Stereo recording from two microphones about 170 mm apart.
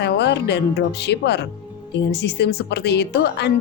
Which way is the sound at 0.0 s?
90° left.